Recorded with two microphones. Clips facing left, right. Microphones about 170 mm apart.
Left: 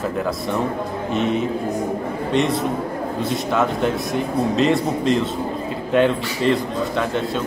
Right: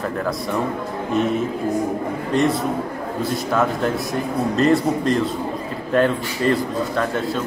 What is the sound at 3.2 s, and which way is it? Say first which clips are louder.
Speech: right 1 dB; centre (ahead or behind).